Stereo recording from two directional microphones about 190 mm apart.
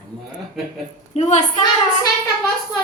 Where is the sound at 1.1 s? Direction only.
35° left (ahead or behind).